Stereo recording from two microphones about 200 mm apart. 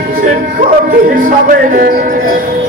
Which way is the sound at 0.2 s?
45° right (ahead or behind).